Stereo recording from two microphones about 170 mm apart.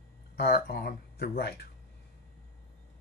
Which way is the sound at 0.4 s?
65° left (ahead or behind).